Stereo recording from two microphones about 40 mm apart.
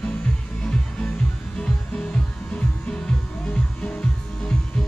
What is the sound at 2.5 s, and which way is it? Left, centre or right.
Music, left.